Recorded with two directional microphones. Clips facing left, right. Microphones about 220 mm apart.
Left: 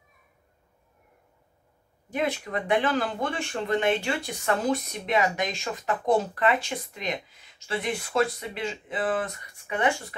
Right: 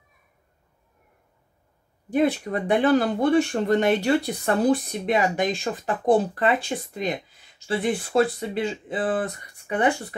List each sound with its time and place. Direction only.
2.1 s speech: 40° right (ahead or behind)